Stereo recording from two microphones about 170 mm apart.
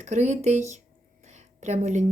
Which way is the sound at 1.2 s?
40° right (ahead or behind).